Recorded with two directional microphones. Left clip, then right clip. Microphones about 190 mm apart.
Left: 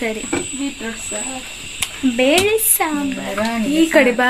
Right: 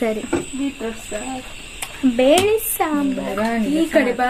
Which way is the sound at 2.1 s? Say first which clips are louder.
Even; 15° right (ahead or behind).